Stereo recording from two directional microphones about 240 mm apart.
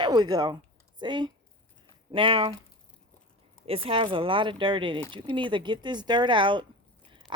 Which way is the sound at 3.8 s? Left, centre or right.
Right.